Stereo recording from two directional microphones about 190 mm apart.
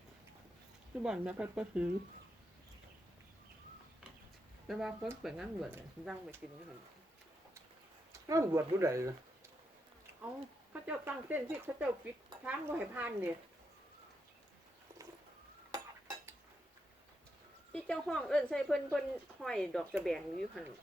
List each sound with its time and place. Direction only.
1.0 s speech: 5° right (ahead or behind)
4.7 s speech: centre (ahead or behind)
8.1 s speech: 15° right (ahead or behind)
10.7 s speech: 10° right (ahead or behind)
15.7 s dishes: 20° right (ahead or behind)
17.7 s speech: 5° left (ahead or behind)